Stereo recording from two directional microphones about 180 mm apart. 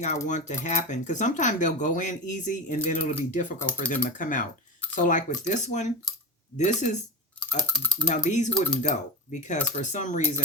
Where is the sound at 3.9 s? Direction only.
45° left (ahead or behind).